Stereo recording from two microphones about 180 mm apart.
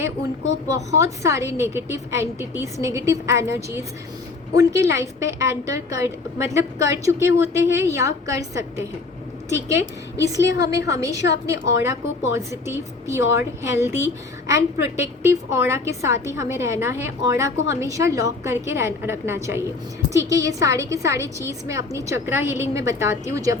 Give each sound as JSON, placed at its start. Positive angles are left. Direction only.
{"t": 0.9, "sound": "a woman's voice", "side_deg": -15}